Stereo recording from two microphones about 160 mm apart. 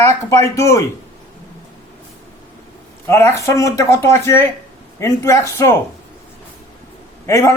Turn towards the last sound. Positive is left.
turn(degrees=20)  # may be behind; listen again after turning